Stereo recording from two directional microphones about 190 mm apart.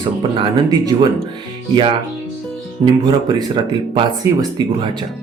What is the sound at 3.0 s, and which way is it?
Speech, 20° right (ahead or behind).